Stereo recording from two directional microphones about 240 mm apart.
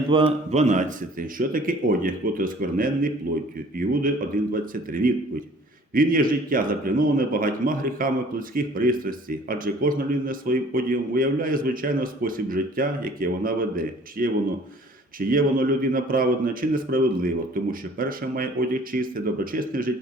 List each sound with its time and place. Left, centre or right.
0.1 s a man's voice: right
4.5 s a man's voice: right